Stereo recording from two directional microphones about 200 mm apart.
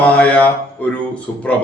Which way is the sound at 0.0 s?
5° left (ahead or behind).